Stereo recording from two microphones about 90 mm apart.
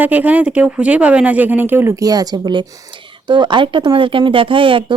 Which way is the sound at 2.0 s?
45° right (ahead or behind).